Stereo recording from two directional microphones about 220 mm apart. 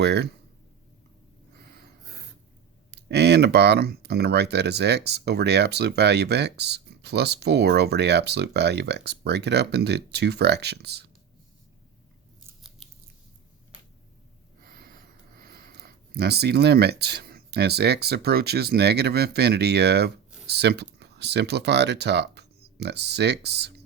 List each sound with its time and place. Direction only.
0.0 s speech: 50° right (ahead or behind)
2.9 s speech: 50° right (ahead or behind)
12.8 s scissors: centre (ahead or behind)
14.6 s a sound: 40° right (ahead or behind)
15.4 s speech: 40° right (ahead or behind)